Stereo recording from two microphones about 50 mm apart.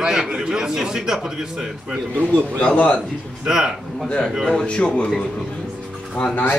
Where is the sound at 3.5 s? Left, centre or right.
Centre.